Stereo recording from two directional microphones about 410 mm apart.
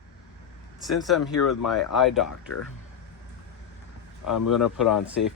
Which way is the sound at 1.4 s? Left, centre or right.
Left.